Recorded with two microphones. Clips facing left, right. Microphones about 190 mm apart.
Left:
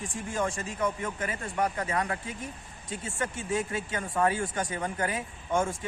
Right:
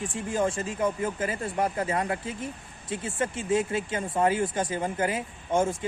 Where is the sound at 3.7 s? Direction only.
25° right (ahead or behind).